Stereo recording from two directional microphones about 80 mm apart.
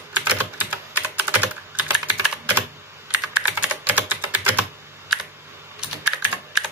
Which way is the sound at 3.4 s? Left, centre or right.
Centre.